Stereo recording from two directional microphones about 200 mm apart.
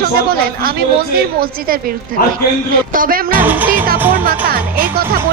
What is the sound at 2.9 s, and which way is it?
Speech, 45° right (ahead or behind).